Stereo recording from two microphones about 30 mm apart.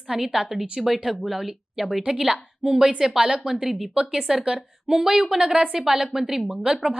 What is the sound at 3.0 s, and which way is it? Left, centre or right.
Speech, centre.